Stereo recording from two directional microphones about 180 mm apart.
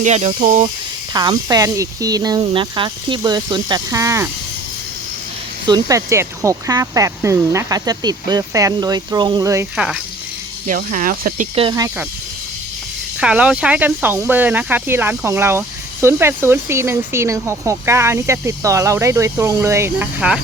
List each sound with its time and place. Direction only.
0.0 s speech: 40° right (ahead or behind)
1.1 s speech: 20° right (ahead or behind)
5.6 s speech: 20° right (ahead or behind)
9.7 s speech: 5° right (ahead or behind)
10.7 s speech: 45° right (ahead or behind)
11.7 s speech: 20° right (ahead or behind)
13.1 s speech: 5° right (ahead or behind)